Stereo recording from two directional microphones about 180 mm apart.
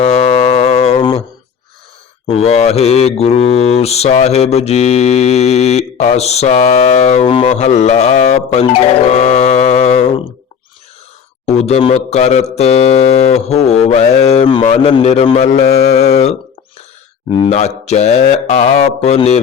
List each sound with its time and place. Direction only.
0.0 s cattle: 40° left (ahead or behind)
2.2 s mantra: 35° left (ahead or behind)
11.4 s mantra: 35° left (ahead or behind)
14.6 s a man's voice: 45° left (ahead or behind)
14.9 s mantra: 30° left (ahead or behind)